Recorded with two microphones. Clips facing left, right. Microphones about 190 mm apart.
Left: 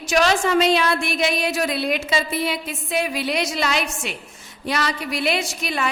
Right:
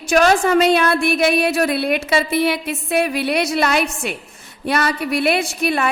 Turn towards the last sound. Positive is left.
turn(degrees=-55)  # may be behind; listen again after turning